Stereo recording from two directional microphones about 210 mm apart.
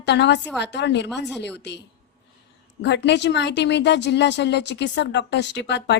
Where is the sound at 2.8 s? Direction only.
55° left (ahead or behind).